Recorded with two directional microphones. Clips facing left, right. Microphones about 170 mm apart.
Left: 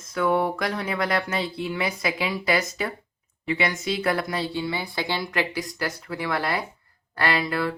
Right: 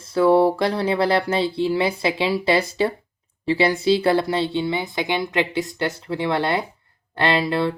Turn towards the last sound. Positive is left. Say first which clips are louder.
# right 4 dB
turn(degrees=-25)  # may be behind; listen again after turning